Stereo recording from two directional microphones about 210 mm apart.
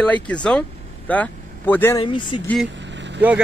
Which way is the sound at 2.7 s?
60° right (ahead or behind).